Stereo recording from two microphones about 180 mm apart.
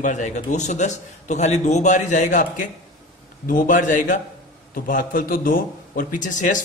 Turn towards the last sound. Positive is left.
turn(degrees=45)  # may be behind; listen again after turning